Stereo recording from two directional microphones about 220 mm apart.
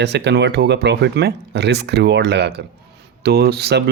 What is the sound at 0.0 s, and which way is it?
Speech, 50° right (ahead or behind).